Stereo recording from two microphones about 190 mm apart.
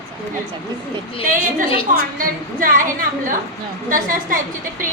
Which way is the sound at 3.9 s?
45° right (ahead or behind).